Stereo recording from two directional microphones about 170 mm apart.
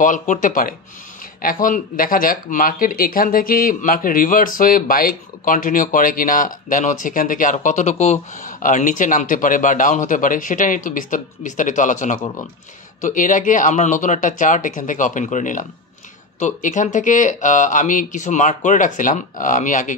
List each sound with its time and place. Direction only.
0.0 s speech: 50° left (ahead or behind)